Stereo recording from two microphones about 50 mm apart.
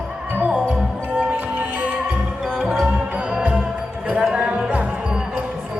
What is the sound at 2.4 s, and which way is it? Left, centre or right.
Music, centre.